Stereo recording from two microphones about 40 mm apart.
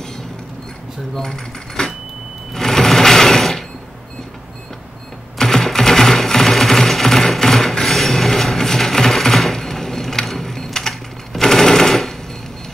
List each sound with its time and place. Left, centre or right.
1.8 s vehicle: centre
2.5 s sewing machine: centre
5.4 s sewing machine: centre